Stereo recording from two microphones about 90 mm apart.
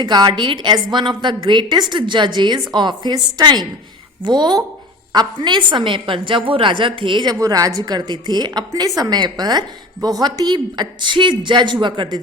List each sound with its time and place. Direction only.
0.0 s a woman's voice: 55° right (ahead or behind)
7.3 s a woman's voice: 40° right (ahead or behind); by 12.2 s 55° right (ahead or behind)